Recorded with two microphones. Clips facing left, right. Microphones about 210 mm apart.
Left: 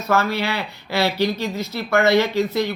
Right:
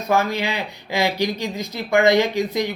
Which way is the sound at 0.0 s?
15° right (ahead or behind).